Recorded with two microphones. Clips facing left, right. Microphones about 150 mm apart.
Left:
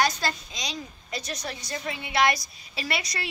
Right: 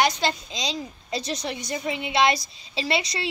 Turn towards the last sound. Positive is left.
turn(degrees=-25)  # may be behind; listen again after turning